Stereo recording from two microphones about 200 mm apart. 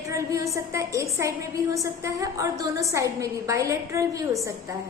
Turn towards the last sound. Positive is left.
turn(degrees=-15)  # may be behind; listen again after turning